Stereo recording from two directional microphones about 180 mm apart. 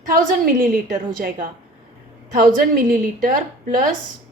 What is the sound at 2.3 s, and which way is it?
A woman's voice, 50° right (ahead or behind).